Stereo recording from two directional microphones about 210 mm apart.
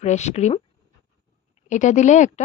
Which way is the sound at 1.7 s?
35° left (ahead or behind).